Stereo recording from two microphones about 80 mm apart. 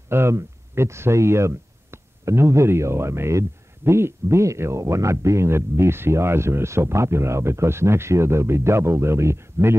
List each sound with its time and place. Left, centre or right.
0.1 s speech: right